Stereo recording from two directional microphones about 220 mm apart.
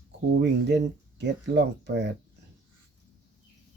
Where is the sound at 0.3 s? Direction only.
50° right (ahead or behind).